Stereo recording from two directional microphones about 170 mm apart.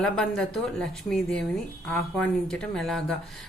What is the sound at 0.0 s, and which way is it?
A woman's voice, 5° left (ahead or behind).